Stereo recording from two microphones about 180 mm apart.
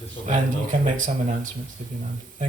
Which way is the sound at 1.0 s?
45° right (ahead or behind).